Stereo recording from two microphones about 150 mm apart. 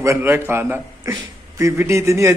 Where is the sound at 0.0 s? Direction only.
15° right (ahead or behind).